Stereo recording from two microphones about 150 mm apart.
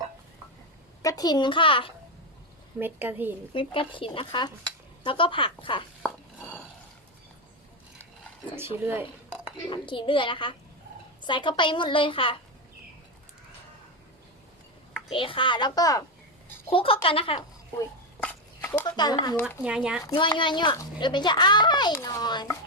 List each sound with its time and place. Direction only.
1.0 s a woman's voice: 25° left (ahead or behind)
2.7 s a woman's voice: 10° right (ahead or behind)
3.5 s a woman's voice: 35° left (ahead or behind)
6.0 s a sound: 10° left (ahead or behind)
8.5 s speech: 15° right (ahead or behind)
9.6 s a woman's voice: 30° left (ahead or behind)
15.1 s a woman's voice: 35° left (ahead or behind)
16.6 s a woman's voice: 35° left (ahead or behind)
18.2 s a sound: 15° left (ahead or behind)
18.9 s a child's voice: 30° left (ahead or behind)
19.6 s a child's voice: 5° right (ahead or behind)
20.1 s a woman's voice: 35° left (ahead or behind)